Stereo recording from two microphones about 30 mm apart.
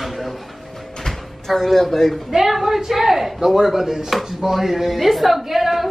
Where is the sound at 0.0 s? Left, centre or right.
Centre.